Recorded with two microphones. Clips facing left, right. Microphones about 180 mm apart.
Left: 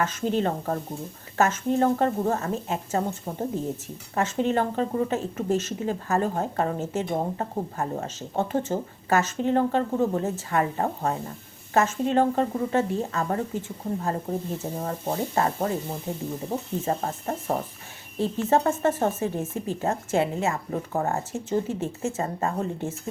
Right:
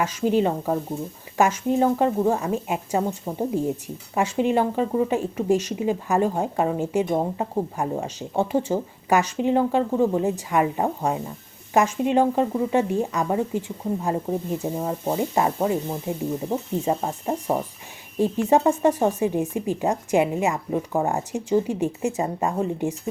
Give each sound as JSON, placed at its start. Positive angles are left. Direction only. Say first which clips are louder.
{"t": 0.0, "sound": "speech", "louder": "right 4 dB", "side_deg": -10}